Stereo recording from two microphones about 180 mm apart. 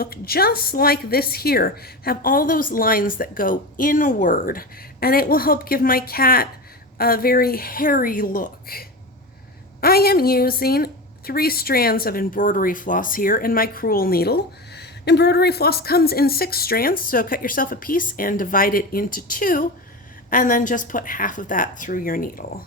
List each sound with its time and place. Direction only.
0.0 s a woman's voice: 60° left (ahead or behind)